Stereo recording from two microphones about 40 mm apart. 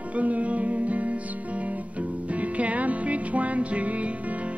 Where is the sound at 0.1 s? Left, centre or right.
Right.